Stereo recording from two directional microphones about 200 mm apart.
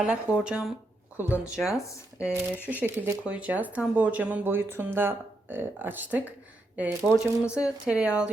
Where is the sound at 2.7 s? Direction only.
10° right (ahead or behind).